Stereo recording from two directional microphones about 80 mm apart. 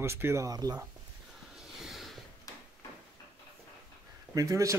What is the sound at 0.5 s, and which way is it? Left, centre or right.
Speech, right.